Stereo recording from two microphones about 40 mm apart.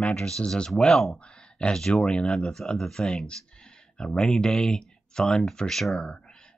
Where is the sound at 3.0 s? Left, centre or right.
Left.